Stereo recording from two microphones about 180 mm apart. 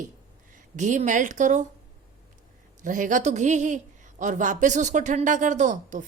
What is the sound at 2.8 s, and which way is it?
Speech, 45° right (ahead or behind).